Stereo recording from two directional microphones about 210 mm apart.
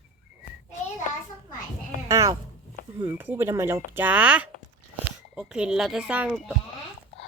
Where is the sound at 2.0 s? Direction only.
15° right (ahead or behind).